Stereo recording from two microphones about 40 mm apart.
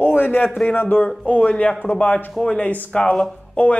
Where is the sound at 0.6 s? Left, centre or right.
Left.